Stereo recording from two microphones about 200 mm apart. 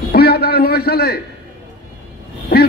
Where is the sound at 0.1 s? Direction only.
50° left (ahead or behind).